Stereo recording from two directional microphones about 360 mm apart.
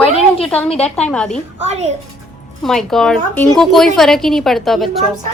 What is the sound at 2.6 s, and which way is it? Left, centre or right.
A woman's voice, centre.